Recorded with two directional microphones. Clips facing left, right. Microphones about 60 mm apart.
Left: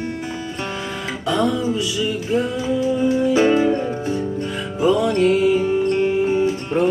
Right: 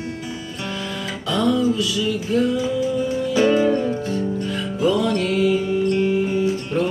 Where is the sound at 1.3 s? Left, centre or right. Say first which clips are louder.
Right 1 dB; left.